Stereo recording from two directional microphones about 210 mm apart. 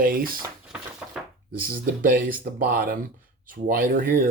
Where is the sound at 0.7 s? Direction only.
5° right (ahead or behind).